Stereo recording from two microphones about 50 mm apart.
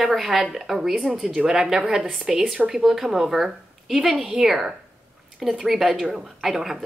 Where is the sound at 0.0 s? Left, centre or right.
Centre.